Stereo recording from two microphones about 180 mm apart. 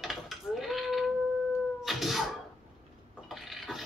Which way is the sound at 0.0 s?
Centre (ahead or behind).